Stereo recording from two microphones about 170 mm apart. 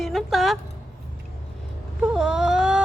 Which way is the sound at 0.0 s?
Centre (ahead or behind).